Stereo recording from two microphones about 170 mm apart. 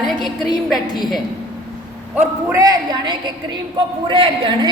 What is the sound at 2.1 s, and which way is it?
A man's voice, 20° right (ahead or behind).